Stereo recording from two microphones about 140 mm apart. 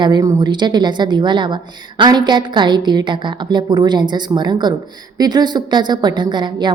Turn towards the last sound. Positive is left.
turn(degrees=-30)  # may be behind; listen again after turning